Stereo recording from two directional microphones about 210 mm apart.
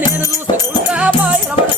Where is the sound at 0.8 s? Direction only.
5° right (ahead or behind).